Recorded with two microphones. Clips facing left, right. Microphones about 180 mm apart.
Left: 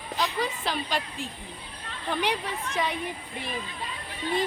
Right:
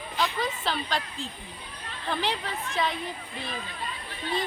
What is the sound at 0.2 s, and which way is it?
A woman's voice, 15° left (ahead or behind).